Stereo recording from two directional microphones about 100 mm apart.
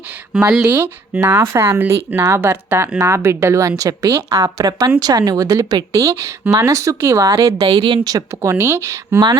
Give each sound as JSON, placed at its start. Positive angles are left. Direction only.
{"t": 0.3, "sound": "speech", "side_deg": -5}
{"t": 0.7, "sound": "speech", "side_deg": -20}
{"t": 7.6, "sound": "speech", "side_deg": -60}
{"t": 8.0, "sound": "speech", "side_deg": -35}